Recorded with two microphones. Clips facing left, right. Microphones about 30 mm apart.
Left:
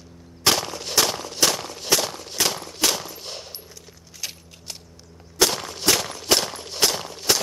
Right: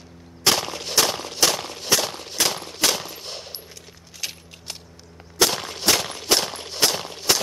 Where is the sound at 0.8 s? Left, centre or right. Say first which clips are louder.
Even; centre.